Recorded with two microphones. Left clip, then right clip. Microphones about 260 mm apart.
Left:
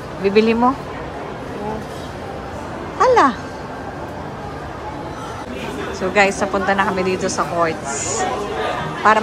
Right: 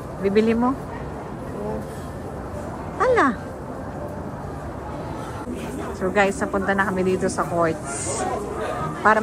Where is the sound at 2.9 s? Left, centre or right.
Centre.